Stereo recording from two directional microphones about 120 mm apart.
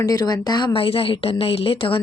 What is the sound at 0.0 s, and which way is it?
Speech, 30° left (ahead or behind).